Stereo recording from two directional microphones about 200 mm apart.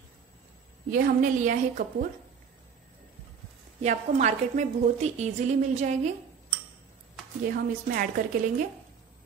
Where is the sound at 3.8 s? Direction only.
35° right (ahead or behind).